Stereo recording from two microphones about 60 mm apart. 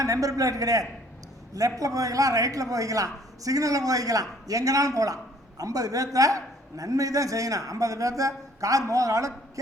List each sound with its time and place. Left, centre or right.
0.0 s a man's voice: right